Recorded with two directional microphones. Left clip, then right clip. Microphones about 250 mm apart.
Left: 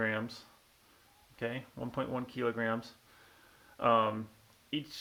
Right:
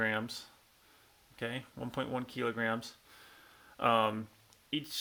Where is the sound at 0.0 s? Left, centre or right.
Right.